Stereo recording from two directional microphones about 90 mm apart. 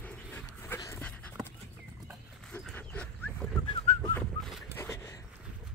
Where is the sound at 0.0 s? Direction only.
20° left (ahead or behind).